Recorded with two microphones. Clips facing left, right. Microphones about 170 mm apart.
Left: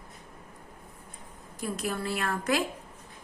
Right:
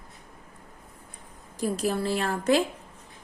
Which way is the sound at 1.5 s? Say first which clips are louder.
Right 6 dB; 35° right (ahead or behind).